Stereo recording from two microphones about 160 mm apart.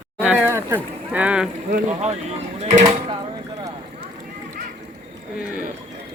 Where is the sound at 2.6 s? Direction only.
45° right (ahead or behind).